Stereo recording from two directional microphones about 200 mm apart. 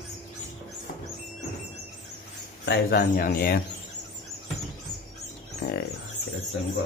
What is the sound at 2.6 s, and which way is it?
Speech, 55° left (ahead or behind).